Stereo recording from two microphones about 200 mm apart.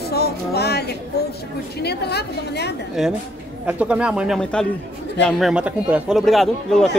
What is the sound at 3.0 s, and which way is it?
Speech, centre (ahead or behind).